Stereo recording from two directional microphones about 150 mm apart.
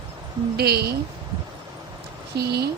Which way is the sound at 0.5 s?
90° right.